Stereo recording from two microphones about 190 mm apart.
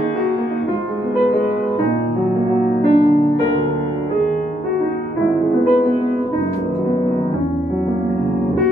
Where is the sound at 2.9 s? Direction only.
45° left (ahead or behind).